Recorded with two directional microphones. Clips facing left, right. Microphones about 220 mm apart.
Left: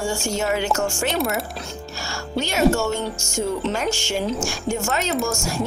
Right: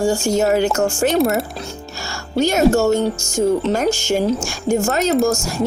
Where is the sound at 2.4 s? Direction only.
40° right (ahead or behind).